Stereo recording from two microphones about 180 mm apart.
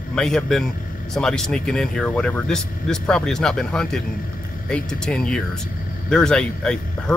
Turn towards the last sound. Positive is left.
turn(degrees=5)  # may be behind; listen again after turning